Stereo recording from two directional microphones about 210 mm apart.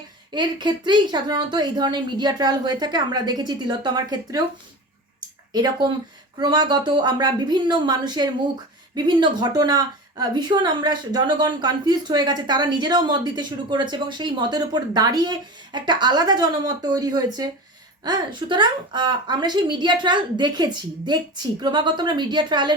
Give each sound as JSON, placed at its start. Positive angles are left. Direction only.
{"t": 0.3, "sound": "a woman's voice", "side_deg": -20}
{"t": 5.5, "sound": "a woman's voice", "side_deg": -20}